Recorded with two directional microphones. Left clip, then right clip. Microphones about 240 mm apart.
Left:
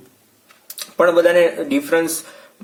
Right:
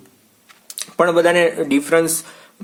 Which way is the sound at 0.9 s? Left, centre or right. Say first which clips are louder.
Left 1 dB; right.